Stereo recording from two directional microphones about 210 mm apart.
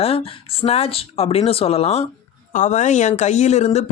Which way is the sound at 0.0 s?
25° left (ahead or behind).